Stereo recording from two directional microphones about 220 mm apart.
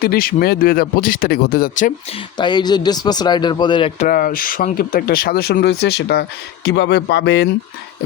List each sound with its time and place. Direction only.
0.0 s speech: 45° left (ahead or behind)
2.4 s speech: 20° left (ahead or behind)
4.0 s speech: 40° left (ahead or behind)